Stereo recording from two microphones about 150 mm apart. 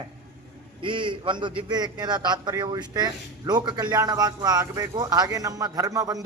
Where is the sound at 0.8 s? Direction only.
35° right (ahead or behind).